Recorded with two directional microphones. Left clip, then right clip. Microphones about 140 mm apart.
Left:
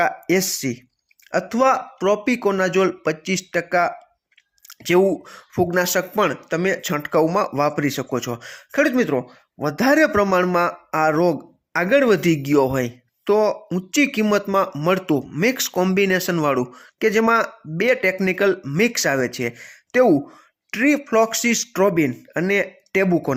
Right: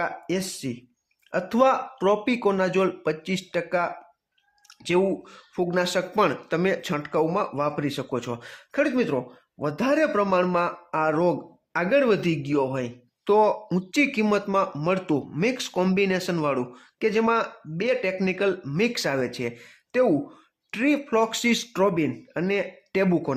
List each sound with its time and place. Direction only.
0.0 s speech: 30° left (ahead or behind)
1.5 s speech: centre (ahead or behind); by 3.9 s 15° left (ahead or behind)
4.7 s speech: 30° left (ahead or behind)
8.7 s speech: 30° left (ahead or behind)
13.2 s speech: 20° left (ahead or behind)